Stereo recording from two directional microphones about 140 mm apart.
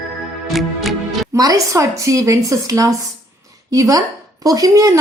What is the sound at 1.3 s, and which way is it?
A woman's voice, 25° right (ahead or behind).